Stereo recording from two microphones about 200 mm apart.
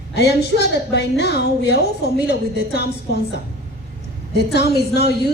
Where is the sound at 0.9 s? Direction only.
55° left (ahead or behind).